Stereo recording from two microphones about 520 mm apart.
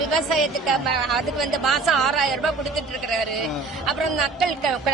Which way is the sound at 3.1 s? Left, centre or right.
Right.